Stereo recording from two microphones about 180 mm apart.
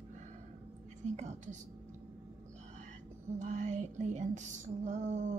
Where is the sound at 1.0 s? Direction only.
40° right (ahead or behind).